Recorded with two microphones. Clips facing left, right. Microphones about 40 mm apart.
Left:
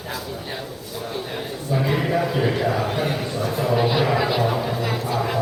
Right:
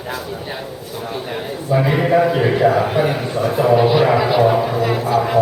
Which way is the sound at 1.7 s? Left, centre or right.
Centre.